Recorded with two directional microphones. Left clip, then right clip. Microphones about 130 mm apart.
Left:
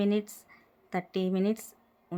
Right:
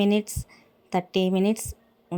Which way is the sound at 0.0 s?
25° right (ahead or behind).